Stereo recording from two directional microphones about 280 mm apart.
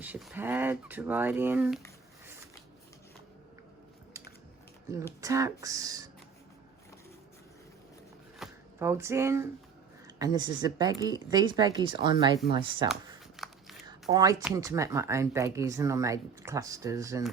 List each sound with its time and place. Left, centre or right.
0.0 s speech: centre
5.2 s speech: centre
8.4 s speech: centre
13.3 s biting: centre
13.8 s a sound: centre
14.4 s speech: centre